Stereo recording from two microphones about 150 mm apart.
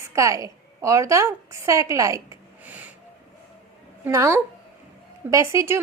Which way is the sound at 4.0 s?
20° right (ahead or behind).